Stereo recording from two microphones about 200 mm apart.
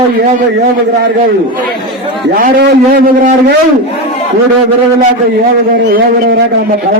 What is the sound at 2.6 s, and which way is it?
Speech, 50° right (ahead or behind).